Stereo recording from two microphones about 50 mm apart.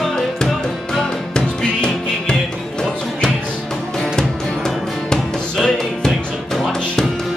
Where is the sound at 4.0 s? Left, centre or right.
Centre.